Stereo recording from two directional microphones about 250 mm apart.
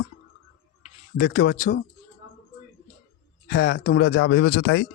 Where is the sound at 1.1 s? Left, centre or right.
Left.